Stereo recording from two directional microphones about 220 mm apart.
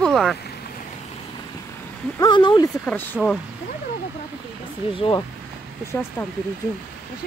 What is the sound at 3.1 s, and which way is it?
Speech, centre (ahead or behind).